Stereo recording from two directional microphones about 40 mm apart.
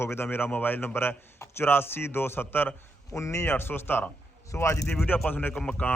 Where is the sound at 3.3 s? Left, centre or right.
Left.